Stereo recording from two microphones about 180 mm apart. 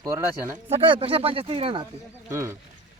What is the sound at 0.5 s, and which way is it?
Speech, 35° right (ahead or behind).